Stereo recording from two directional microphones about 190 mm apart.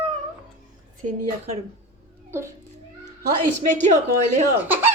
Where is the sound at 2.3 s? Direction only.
15° right (ahead or behind).